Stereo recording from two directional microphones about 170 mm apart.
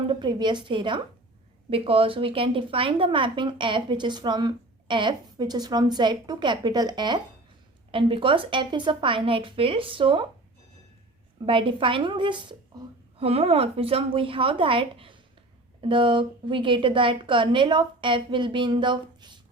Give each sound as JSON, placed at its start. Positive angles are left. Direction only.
{"t": 0.1, "sound": "a woman's voice", "side_deg": -25}
{"t": 11.4, "sound": "a woman's voice", "side_deg": -30}